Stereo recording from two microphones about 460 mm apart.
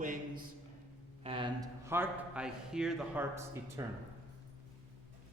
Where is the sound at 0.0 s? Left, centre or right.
Centre.